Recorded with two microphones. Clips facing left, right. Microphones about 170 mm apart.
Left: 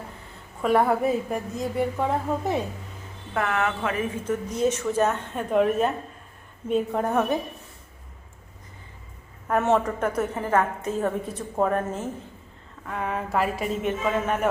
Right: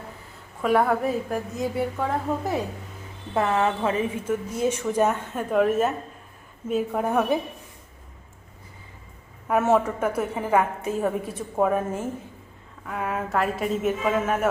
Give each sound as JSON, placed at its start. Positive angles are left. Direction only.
{"t": 0.6, "sound": "a woman's voice", "side_deg": 0}
{"t": 3.3, "sound": "speech", "side_deg": -25}
{"t": 4.3, "sound": "a woman's voice", "side_deg": -10}
{"t": 9.5, "sound": "a woman's voice", "side_deg": -5}